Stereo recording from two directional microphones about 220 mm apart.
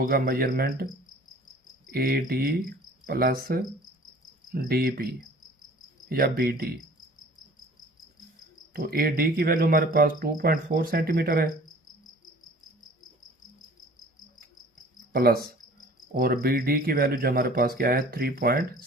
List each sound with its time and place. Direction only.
0.0 s speech: 45° right (ahead or behind)
1.9 s cricket: 45° right (ahead or behind)
4.5 s speech: 45° right (ahead or behind)
6.1 s speech: 45° right (ahead or behind)
8.7 s speech: 40° right (ahead or behind)
15.1 s cricket: 45° right (ahead or behind)
16.1 s speech: 40° right (ahead or behind)